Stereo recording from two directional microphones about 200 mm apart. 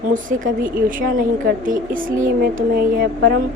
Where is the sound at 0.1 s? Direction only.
40° right (ahead or behind).